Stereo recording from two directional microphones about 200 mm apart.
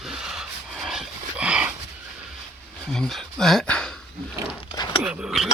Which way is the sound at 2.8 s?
Centre (ahead or behind).